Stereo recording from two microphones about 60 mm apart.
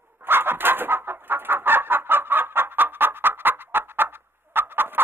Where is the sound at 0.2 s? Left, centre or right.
Right.